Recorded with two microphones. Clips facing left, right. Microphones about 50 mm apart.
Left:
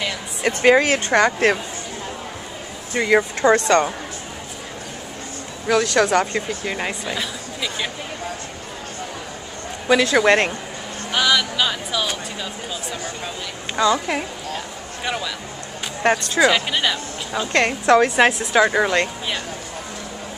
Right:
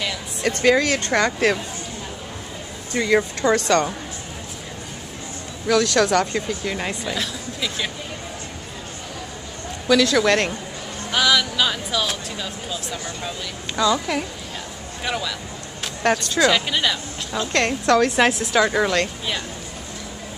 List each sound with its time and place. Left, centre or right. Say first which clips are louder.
0.0 s a sound: left 1 dB; centre
0.7 s speech: left 3 dB; left
1.0 s speech: left 3 dB; centre
2.9 s a woman's voice: left 2 dB; centre
5.7 s a woman's voice: left 1 dB; centre
9.8 s speech: left 2 dB; left
11.1 s speech: even; centre
13.7 s speech: left 1 dB; centre
15.0 s a woman's voice: even; centre